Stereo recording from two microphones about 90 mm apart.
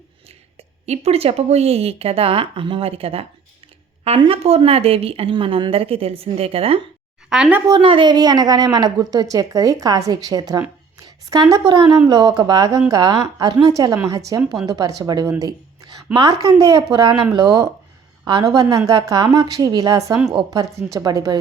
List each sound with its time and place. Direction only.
1.2 s a woman's voice: 90° right
4.3 s a woman's voice: 90° right
7.3 s speech: 5° right (ahead or behind)
7.7 s a woman's voice: 70° right (ahead or behind); by 10.6 s 45° right (ahead or behind)
11.0 s a sound: 45° right (ahead or behind)
12.0 s a woman's voice: 50° right (ahead or behind)
15.4 s a sound: 45° right (ahead or behind)
16.1 s a woman's voice: 50° right (ahead or behind)
16.9 s a woman's voice: 60° right (ahead or behind); by 21.3 s 40° right (ahead or behind)